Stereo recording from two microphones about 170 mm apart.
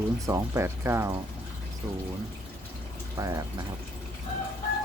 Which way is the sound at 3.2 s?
20° right (ahead or behind).